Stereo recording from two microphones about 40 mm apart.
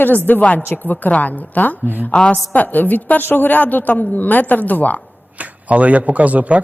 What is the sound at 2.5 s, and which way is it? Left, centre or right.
A woman's voice, left.